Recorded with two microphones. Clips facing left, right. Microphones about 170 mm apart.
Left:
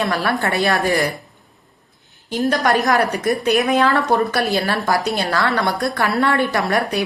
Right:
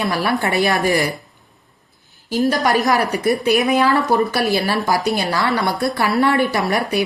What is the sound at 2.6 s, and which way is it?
A woman's voice, centre (ahead or behind).